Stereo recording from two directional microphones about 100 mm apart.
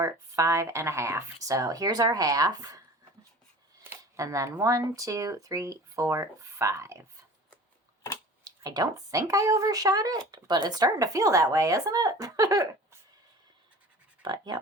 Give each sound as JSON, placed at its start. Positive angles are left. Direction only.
{"t": 0.0, "sound": "speech", "side_deg": -30}
{"t": 3.8, "sound": "a sound", "side_deg": -30}
{"t": 4.6, "sound": "speech", "side_deg": -30}
{"t": 8.4, "sound": "speech", "side_deg": -40}
{"t": 14.2, "sound": "speech", "side_deg": -45}